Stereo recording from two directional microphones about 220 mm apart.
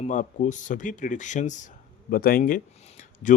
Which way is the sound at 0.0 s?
35° left (ahead or behind).